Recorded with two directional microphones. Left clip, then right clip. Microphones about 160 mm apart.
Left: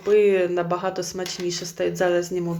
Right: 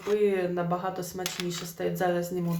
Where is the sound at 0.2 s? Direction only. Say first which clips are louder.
Left 7 dB; 20° left (ahead or behind).